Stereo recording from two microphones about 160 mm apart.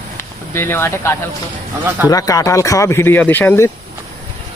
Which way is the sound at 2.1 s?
20° left (ahead or behind).